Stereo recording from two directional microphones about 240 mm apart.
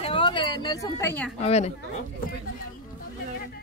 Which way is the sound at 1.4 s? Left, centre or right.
Left.